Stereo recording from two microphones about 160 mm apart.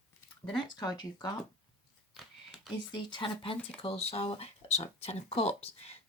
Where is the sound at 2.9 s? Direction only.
30° left (ahead or behind).